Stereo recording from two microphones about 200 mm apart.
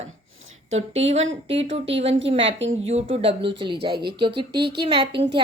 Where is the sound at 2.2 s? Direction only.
30° right (ahead or behind).